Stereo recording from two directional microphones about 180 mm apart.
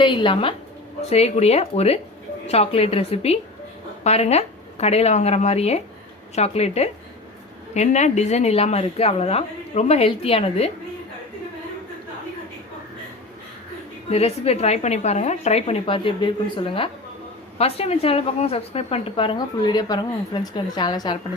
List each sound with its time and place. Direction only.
0.0 s a woman's voice: 25° left (ahead or behind)
14.1 s a woman's voice: 35° left (ahead or behind)